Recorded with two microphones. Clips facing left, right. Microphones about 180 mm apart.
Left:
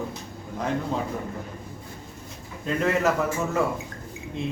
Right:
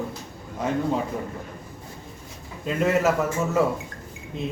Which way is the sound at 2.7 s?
5° right (ahead or behind).